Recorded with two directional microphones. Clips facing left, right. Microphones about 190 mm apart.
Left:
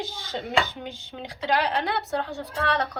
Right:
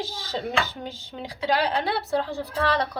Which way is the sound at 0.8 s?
35° right (ahead or behind).